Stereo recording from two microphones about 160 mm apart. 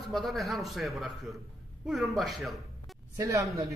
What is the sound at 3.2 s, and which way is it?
Speech, 20° right (ahead or behind).